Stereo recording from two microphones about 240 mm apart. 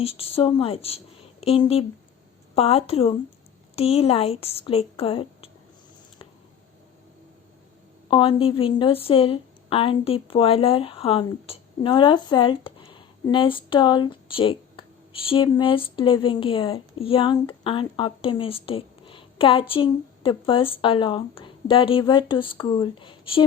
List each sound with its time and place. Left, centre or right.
0.0 s a woman's voice: left
8.1 s a woman's voice: left